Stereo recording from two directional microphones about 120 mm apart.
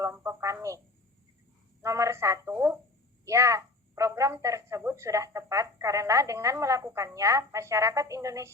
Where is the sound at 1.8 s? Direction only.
25° right (ahead or behind).